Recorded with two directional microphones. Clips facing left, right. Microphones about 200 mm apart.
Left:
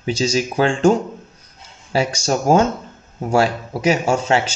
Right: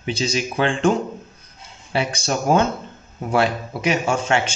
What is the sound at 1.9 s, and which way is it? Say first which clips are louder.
Mantra: left 3 dB; 40° left (ahead or behind).